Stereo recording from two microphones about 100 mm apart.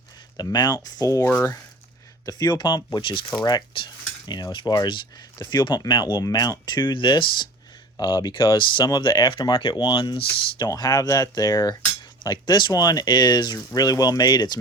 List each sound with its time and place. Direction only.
0.3 s speech: 45° left (ahead or behind)
2.2 s speech: 45° left (ahead or behind)